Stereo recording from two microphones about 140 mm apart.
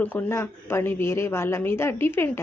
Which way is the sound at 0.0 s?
15° left (ahead or behind).